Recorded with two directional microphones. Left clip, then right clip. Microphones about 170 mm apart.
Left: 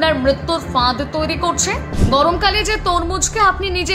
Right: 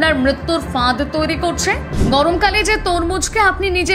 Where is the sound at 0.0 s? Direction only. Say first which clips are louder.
Even; 15° right (ahead or behind).